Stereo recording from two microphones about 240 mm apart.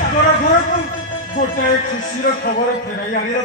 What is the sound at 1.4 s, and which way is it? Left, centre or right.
A man's voice, left.